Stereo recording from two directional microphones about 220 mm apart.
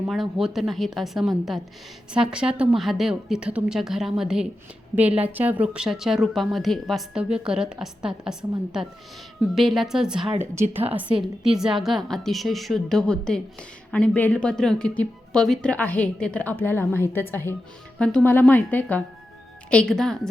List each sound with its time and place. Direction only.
0.1 s a woman's voice: centre (ahead or behind)